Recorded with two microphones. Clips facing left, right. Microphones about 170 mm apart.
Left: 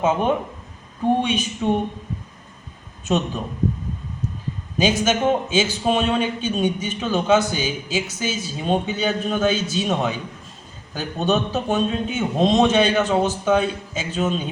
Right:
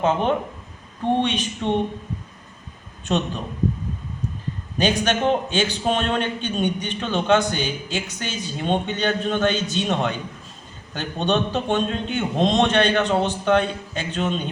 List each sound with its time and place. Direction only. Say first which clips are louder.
0.0 s a man's voice: left 1 dB; 10° left (ahead or behind)
3.1 s a man's voice: left 2 dB; 10° left (ahead or behind)
4.8 s a man's voice: left 1 dB; 10° left (ahead or behind)